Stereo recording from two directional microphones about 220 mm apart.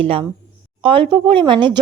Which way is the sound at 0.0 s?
25° right (ahead or behind).